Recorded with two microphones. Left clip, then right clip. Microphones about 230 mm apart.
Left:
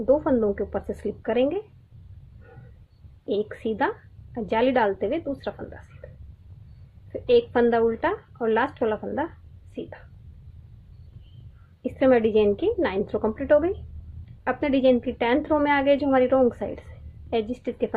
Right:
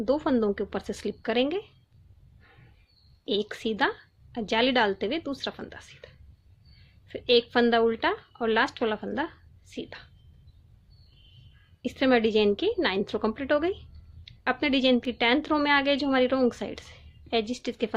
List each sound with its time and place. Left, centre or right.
0.0 s a woman's voice: right
3.2 s a woman's voice: right
7.1 s a woman's voice: right
11.8 s a woman's voice: right